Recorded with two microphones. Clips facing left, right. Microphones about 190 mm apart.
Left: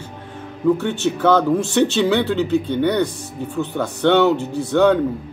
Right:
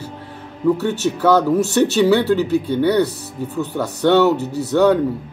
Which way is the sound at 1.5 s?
40° right (ahead or behind).